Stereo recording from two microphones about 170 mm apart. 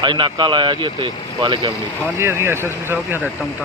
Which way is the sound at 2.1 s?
15° right (ahead or behind).